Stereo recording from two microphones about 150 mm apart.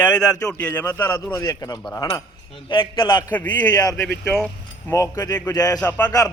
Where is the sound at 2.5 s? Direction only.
35° left (ahead or behind).